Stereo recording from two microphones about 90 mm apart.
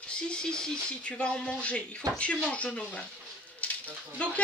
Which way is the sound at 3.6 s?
15° left (ahead or behind).